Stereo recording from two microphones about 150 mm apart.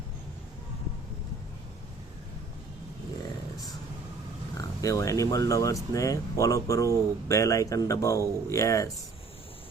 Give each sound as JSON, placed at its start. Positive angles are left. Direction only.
{"t": 4.5, "sound": "speech", "side_deg": 20}